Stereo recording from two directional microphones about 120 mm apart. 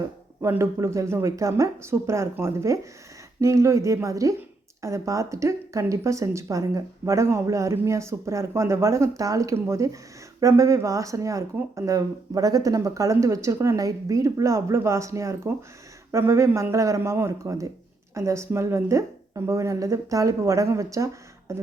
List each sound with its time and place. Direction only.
0.4 s speech: 20° right (ahead or behind)